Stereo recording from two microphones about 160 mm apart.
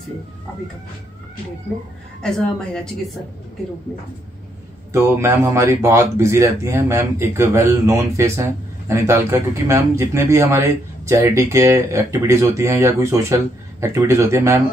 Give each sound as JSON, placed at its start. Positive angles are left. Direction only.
{"t": 2.2, "sound": "a woman's voice", "side_deg": 5}
{"t": 4.9, "sound": "speech", "side_deg": -15}